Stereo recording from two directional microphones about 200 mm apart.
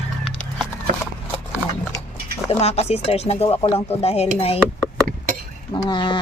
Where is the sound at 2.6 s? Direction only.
30° left (ahead or behind).